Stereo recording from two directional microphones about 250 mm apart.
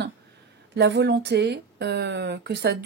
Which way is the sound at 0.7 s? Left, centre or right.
Right.